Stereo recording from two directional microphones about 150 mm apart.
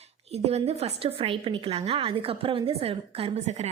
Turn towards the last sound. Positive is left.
turn(degrees=-50)  # may be behind; listen again after turning